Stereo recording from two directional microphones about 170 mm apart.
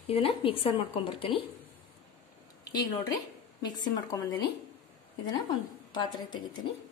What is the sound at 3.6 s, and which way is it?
Speech, 25° left (ahead or behind).